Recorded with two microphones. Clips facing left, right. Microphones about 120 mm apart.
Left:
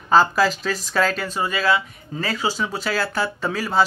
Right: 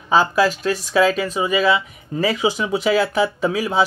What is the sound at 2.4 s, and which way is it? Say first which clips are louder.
Speech: right 5 dB; 15° right (ahead or behind).